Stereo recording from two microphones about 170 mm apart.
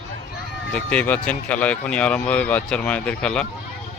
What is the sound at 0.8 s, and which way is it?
Speech, 10° left (ahead or behind).